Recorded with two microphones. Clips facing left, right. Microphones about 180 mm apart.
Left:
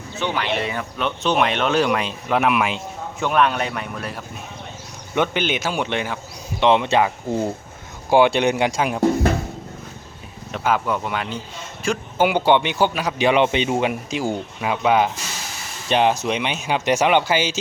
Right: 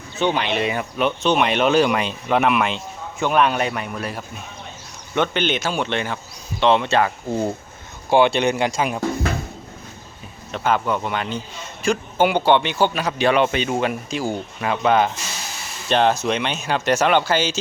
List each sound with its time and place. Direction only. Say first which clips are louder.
0.2 s speech: right 3 dB; 20° right (ahead or behind)
1.2 s speech: right 1 dB; centre (ahead or behind)
5.1 s speech: even; 10° left (ahead or behind)
8.1 s speech: left 1 dB; 15° left (ahead or behind)
10.5 s speech: right 1 dB; 5° left (ahead or behind)